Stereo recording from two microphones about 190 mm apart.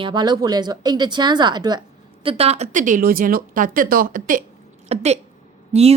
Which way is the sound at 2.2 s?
30° right (ahead or behind).